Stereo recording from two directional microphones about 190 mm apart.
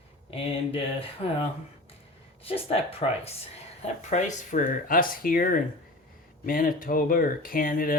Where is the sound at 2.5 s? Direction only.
30° left (ahead or behind).